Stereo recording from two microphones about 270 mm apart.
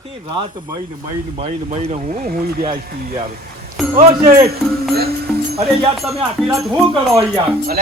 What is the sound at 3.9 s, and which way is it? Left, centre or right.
Speech, right.